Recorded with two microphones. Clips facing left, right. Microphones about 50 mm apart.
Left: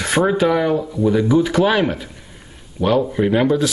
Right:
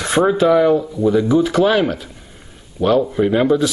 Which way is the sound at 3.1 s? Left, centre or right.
Centre.